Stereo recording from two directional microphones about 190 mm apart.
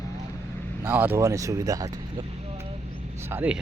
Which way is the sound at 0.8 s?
10° right (ahead or behind).